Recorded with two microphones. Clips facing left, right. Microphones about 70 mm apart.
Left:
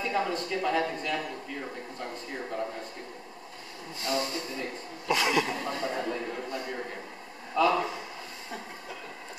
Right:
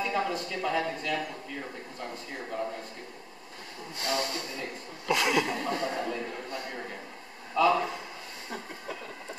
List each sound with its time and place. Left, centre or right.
0.1 s a man's voice: centre
4.0 s speech: right
4.6 s a man's voice: centre